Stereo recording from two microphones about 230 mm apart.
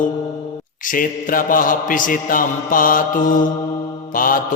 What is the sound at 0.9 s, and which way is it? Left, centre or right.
Mantra, left.